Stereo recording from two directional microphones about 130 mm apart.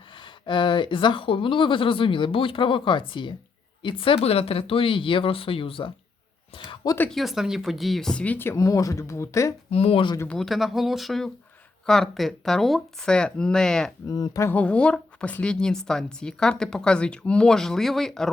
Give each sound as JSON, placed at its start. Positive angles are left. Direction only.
{"t": 0.1, "sound": "speech", "side_deg": 40}
{"t": 7.1, "sound": "speech", "side_deg": 0}
{"t": 9.6, "sound": "speech", "side_deg": 50}
{"t": 10.2, "sound": "a woman's voice", "side_deg": 0}
{"t": 14.1, "sound": "speech", "side_deg": 25}
{"t": 14.5, "sound": "a woman's voice", "side_deg": 10}